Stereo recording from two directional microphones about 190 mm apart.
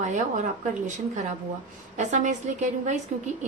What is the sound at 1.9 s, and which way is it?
A woman's voice, 40° right (ahead or behind).